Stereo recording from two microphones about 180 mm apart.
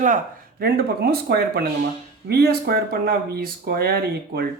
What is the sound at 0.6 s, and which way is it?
Speech, 60° right (ahead or behind).